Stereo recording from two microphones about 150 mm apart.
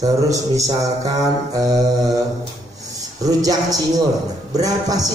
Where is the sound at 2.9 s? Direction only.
25° right (ahead or behind).